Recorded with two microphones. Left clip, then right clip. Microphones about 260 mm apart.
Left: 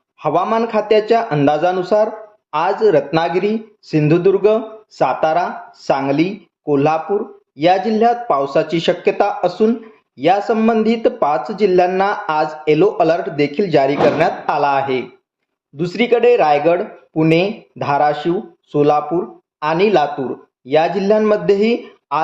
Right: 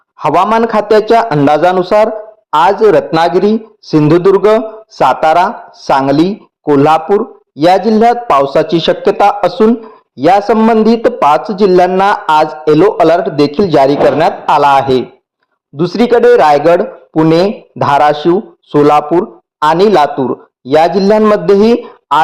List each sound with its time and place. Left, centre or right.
0.2 s a man's voice: right